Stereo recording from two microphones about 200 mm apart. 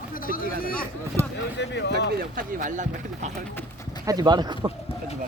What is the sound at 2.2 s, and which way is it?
Speech, 45° right (ahead or behind).